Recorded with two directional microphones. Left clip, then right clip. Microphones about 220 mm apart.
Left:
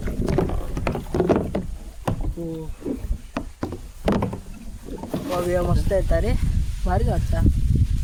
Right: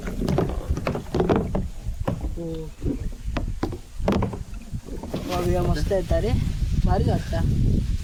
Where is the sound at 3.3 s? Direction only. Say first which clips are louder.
Even; 20° left (ahead or behind).